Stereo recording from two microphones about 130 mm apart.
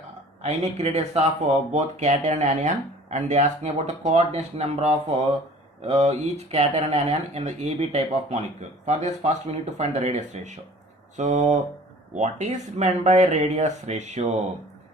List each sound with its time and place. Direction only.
0.4 s speech: 55° right (ahead or behind)